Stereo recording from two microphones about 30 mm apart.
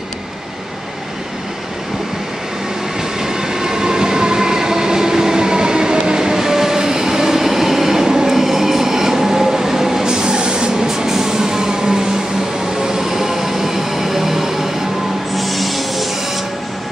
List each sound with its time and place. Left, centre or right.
3.2 s train: centre
10.1 s printer: right
10.9 s vehicle: centre
12.8 s train: centre
15.3 s train: centre